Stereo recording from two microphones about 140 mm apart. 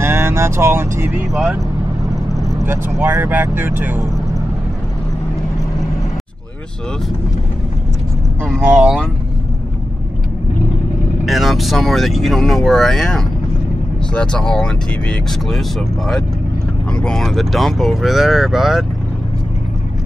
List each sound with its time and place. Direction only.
0.0 s vehicle: 20° right (ahead or behind)
1.3 s speech: 5° right (ahead or behind)
2.6 s speech: 15° right (ahead or behind)
8.7 s speech: 5° right (ahead or behind)
11.2 s speech: centre (ahead or behind)
16.9 s speech: 5° left (ahead or behind)